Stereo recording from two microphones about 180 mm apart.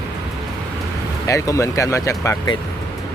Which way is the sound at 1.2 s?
15° left (ahead or behind).